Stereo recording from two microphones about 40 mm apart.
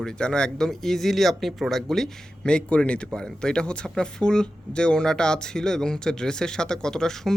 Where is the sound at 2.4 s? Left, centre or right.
Left.